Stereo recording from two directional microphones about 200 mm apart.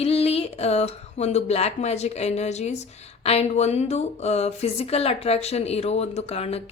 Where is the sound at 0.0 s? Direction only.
30° left (ahead or behind).